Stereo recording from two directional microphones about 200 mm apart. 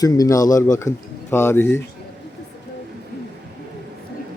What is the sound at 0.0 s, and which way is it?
Speech, 15° left (ahead or behind).